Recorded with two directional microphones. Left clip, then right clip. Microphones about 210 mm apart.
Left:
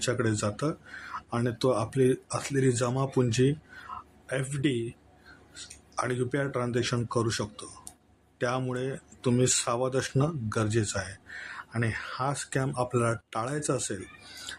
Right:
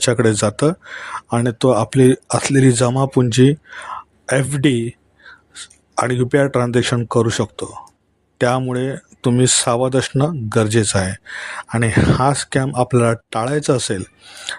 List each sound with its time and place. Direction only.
0.0 s speech: 45° right (ahead or behind)